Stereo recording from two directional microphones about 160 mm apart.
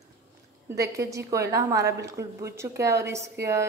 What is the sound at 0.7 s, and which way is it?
A woman's voice, 20° right (ahead or behind).